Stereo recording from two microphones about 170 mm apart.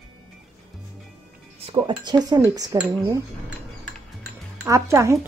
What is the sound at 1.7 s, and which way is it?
Speech, 25° right (ahead or behind).